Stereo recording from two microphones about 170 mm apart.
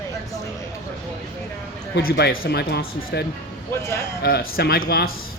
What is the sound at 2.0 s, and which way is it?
Speech, 70° left (ahead or behind).